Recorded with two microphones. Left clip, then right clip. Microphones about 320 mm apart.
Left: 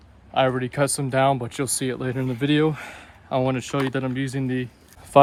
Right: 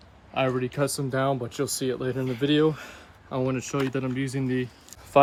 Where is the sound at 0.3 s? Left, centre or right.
Centre.